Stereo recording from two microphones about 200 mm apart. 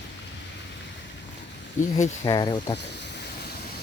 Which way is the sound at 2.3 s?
20° left (ahead or behind).